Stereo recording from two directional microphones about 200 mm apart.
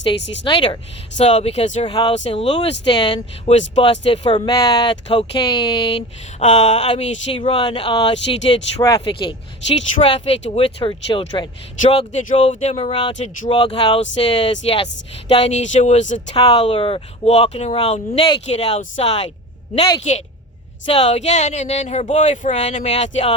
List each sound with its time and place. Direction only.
0.4 s speech: 25° left (ahead or behind)